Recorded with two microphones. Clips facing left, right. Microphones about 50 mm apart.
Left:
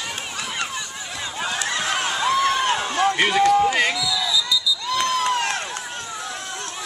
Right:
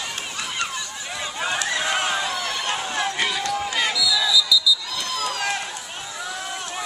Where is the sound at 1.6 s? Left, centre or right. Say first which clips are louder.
Even; centre.